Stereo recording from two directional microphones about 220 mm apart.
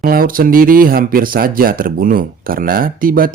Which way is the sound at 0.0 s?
40° right (ahead or behind).